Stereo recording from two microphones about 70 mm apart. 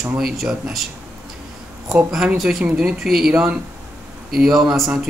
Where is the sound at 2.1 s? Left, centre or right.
Centre.